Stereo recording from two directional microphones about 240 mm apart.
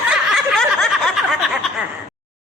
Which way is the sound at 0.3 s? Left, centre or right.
Centre.